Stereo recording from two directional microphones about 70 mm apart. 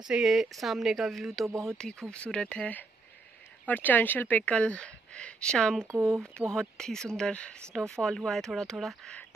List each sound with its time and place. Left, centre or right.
0.2 s speech: centre
1.8 s speech: centre
5.9 s speech: right
6.4 s speech: centre